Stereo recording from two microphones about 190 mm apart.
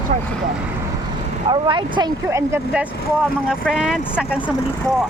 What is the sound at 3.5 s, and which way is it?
Speech, 5° right (ahead or behind).